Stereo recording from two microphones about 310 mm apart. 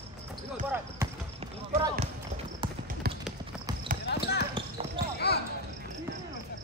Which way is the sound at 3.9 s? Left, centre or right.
Right.